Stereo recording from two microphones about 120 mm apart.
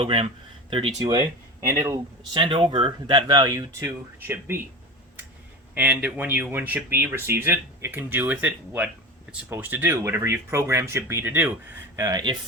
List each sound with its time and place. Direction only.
0.0 s speech: 50° right (ahead or behind)
1.6 s speech: 25° right (ahead or behind)
2.3 s speech: 45° right (ahead or behind); by 4.6 s 20° right (ahead or behind)
5.7 s speech: 10° right (ahead or behind)
11.9 s speech: 30° right (ahead or behind)